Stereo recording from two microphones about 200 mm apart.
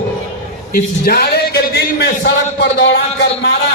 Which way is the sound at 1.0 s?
50° left (ahead or behind).